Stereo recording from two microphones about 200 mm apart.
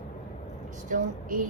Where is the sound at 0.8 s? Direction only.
40° right (ahead or behind).